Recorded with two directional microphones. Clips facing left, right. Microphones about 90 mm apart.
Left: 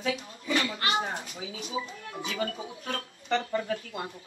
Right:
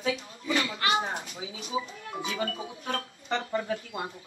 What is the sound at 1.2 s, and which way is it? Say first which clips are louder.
Speech: even; 30° right (ahead or behind).